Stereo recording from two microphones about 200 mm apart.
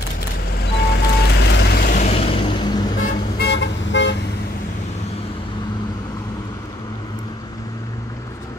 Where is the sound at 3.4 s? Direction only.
60° left (ahead or behind).